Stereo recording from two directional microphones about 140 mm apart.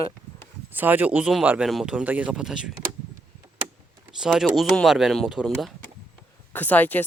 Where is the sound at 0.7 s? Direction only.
10° right (ahead or behind).